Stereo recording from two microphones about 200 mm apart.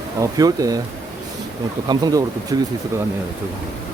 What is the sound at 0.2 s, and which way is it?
Speech, 20° right (ahead or behind).